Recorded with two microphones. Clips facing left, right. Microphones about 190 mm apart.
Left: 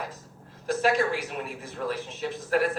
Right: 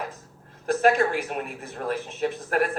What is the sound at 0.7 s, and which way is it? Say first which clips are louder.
A woman's voice: right 4 dB; 55° right (ahead or behind).